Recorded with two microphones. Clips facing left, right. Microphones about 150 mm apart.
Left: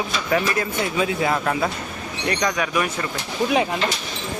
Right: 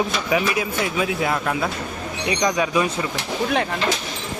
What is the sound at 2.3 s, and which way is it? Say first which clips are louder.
Speech: right 2 dB; 15° right (ahead or behind).